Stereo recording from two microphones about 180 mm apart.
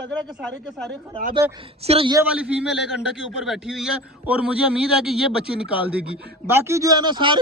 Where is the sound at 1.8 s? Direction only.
35° right (ahead or behind).